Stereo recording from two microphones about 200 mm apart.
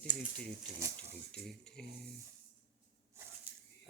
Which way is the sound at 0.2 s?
40° right (ahead or behind).